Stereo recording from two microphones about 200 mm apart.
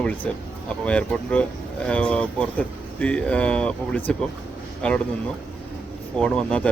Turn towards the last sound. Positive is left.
turn(degrees=5)  # may be behind; listen again after turning